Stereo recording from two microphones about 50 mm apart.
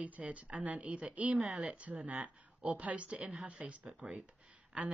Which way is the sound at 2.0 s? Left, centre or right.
Right.